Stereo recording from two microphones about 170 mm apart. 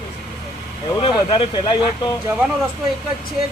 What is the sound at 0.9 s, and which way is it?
Speech, 25° left (ahead or behind).